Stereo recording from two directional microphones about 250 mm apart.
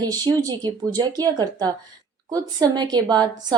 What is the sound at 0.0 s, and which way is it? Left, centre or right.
Speech, centre.